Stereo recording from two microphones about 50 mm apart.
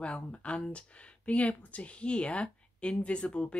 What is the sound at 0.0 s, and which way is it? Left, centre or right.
Speech, left.